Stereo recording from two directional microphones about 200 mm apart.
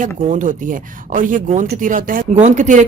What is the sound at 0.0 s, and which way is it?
Speech, 40° right (ahead or behind).